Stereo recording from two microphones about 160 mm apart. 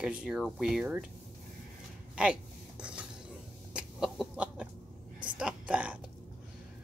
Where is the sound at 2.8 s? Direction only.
5° right (ahead or behind).